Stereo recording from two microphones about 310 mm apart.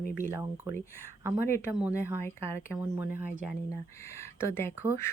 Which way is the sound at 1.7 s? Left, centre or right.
Centre.